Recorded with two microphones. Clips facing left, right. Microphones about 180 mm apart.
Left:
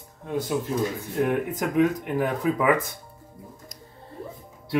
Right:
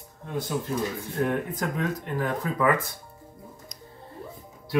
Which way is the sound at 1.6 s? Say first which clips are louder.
Left 7 dB; 15° left (ahead or behind).